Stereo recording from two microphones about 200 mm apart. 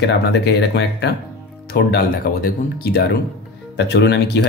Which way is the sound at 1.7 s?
50° left (ahead or behind).